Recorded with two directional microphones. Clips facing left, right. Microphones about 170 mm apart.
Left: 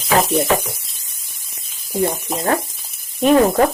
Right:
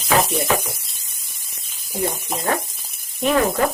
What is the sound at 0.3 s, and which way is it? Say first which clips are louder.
Speech: left 4 dB; centre (ahead or behind).